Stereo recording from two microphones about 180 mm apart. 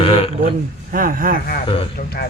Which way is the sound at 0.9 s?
50° right (ahead or behind).